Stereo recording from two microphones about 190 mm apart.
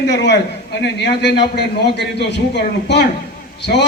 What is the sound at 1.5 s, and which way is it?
A man's voice, 60° left (ahead or behind).